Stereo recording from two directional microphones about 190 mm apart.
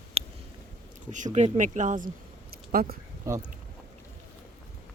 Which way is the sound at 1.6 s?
40° right (ahead or behind).